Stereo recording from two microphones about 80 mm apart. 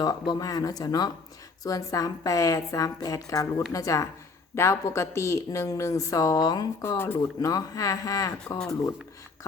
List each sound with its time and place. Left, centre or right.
0.0 s speech: left
6.8 s speech: left
7.4 s speech: left